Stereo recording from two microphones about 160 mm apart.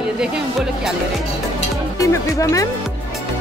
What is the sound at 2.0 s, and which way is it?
Speech, 20° left (ahead or behind).